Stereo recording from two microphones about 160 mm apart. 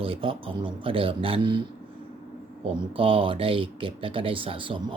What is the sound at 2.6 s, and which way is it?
Speech, 35° right (ahead or behind).